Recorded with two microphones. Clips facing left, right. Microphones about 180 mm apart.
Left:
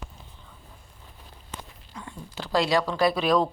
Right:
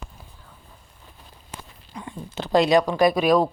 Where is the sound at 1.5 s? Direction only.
15° right (ahead or behind).